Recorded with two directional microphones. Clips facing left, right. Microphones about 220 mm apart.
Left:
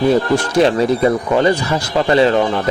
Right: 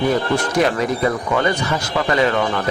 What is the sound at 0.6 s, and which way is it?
Speech, 30° left (ahead or behind).